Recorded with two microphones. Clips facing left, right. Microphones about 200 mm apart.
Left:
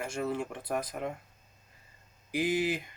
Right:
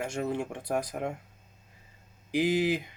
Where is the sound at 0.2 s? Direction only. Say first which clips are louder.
Even; 15° right (ahead or behind).